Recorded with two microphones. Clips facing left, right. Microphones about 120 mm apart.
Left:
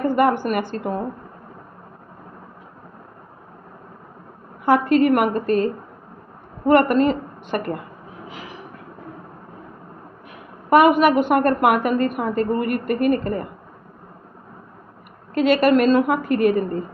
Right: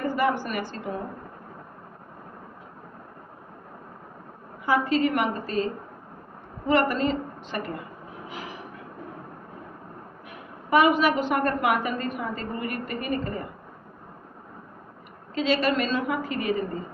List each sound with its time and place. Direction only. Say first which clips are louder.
0.0 s a woman's voice: left 7 dB; 55° left (ahead or behind)
4.6 s a woman's voice: left 7 dB; 55° left (ahead or behind)
6.7 s a woman's voice: left 7 dB; 55° left (ahead or behind)
10.7 s a woman's voice: left 6 dB; 55° left (ahead or behind)
15.4 s a woman's voice: left 8 dB; 55° left (ahead or behind)